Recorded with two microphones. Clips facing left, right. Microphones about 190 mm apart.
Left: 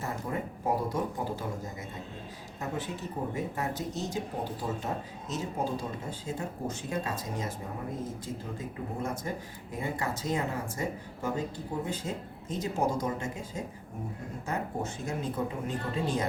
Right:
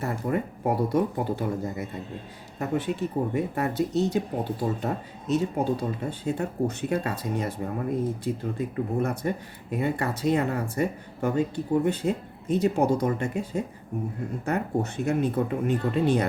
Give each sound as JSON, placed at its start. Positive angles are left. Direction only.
{"t": 0.0, "sound": "speech", "side_deg": -65}
{"t": 5.3, "sound": "speech", "side_deg": -65}